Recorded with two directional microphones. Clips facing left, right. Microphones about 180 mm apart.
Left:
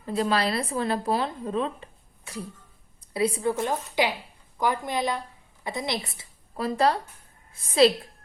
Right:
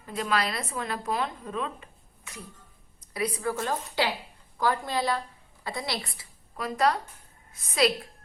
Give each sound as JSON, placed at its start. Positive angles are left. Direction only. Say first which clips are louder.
{"t": 0.0, "sound": "a woman's voice", "louder": "left 4 dB", "side_deg": 30}